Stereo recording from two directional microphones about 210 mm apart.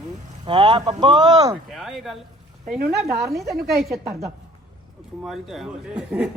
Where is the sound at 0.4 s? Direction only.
25° right (ahead or behind).